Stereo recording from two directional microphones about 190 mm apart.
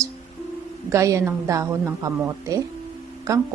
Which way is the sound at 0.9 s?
15° right (ahead or behind).